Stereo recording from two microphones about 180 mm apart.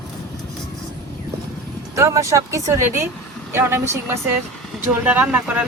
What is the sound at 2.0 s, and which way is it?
Speech, 15° right (ahead or behind).